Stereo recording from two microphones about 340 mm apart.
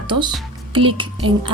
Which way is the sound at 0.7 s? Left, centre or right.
Centre.